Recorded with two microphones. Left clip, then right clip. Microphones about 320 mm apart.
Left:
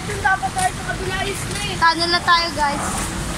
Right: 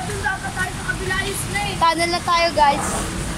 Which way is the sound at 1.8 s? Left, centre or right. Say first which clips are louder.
Left 3 dB; centre.